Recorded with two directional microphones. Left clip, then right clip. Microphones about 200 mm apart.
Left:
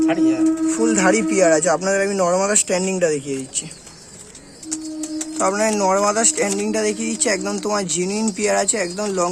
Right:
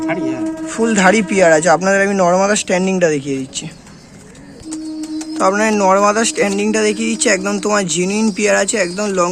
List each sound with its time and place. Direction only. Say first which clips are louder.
0.7 s speech: right 8 dB; centre (ahead or behind)
5.4 s speech: right 5 dB; 5° left (ahead or behind)